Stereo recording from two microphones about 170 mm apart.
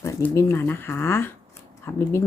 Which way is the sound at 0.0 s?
15° left (ahead or behind).